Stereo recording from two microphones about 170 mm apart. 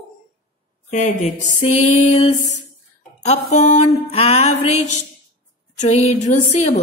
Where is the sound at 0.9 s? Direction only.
50° left (ahead or behind).